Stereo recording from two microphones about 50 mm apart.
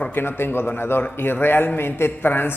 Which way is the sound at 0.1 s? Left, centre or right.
Left.